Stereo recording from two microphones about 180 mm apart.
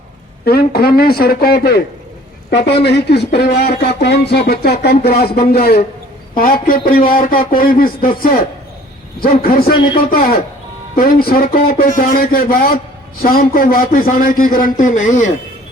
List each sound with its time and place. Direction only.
0.4 s a man's voice: 60° left (ahead or behind)
9.2 s speech: 55° left (ahead or behind)
9.7 s speech: 25° left (ahead or behind)
10.1 s a man's voice: 55° left (ahead or behind)